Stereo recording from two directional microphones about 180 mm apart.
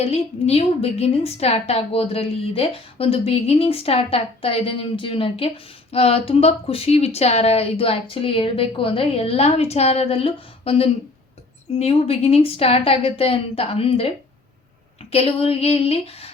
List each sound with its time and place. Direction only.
0.0 s a woman's voice: 35° left (ahead or behind)
15.1 s a woman's voice: 35° left (ahead or behind)